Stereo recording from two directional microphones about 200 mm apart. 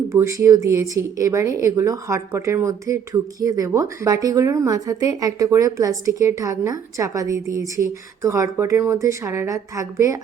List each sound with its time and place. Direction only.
0.1 s a woman's voice: 15° right (ahead or behind)